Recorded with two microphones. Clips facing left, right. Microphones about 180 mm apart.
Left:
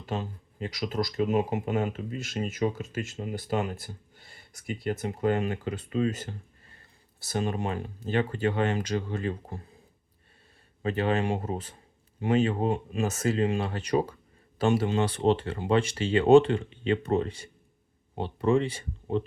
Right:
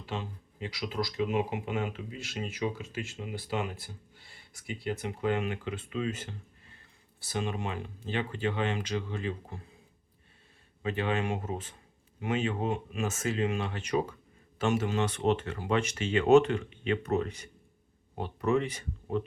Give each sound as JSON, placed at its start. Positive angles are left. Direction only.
{"t": 0.0, "sound": "speech", "side_deg": 45}
{"t": 10.8, "sound": "speech", "side_deg": 40}